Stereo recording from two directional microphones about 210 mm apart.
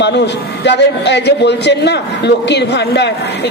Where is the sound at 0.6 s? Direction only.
55° left (ahead or behind).